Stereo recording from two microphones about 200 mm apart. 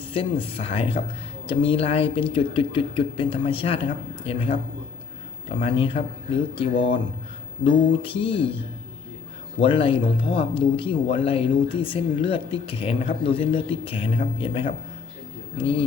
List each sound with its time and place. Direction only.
0.1 s speech: 25° left (ahead or behind)
7.6 s speech: 25° left (ahead or behind)